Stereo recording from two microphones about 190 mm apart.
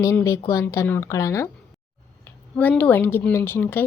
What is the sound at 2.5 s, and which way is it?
Speech, 10° left (ahead or behind).